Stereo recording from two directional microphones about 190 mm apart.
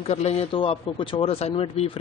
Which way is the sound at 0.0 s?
35° left (ahead or behind).